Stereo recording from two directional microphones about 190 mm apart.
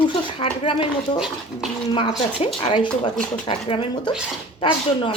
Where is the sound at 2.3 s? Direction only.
25° left (ahead or behind).